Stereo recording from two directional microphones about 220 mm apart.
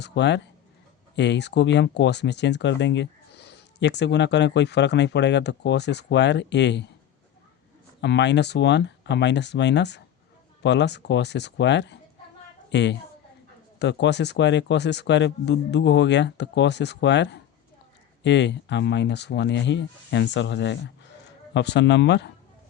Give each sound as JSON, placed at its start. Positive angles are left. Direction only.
{"t": 0.0, "sound": "speech", "side_deg": 50}
{"t": 8.0, "sound": "speech", "side_deg": 50}